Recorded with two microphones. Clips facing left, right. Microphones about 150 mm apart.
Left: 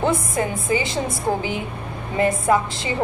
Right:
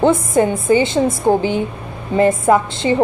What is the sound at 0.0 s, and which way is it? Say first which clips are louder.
A woman's voice: right 8 dB; 30° right (ahead or behind).